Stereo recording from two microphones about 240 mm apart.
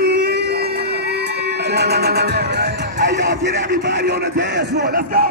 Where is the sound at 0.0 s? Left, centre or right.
Right.